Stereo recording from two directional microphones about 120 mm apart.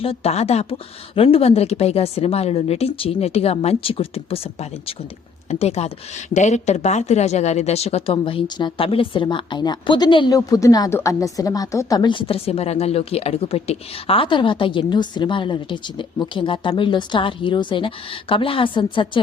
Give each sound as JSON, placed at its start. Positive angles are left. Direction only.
{"t": 0.0, "sound": "speech", "side_deg": 55}
{"t": 5.5, "sound": "speech", "side_deg": 60}
{"t": 6.3, "sound": "a woman's voice", "side_deg": 80}
{"t": 10.3, "sound": "a woman's voice", "side_deg": 30}